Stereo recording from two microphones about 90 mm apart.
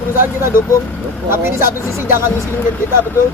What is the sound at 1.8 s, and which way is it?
Speech, 35° left (ahead or behind).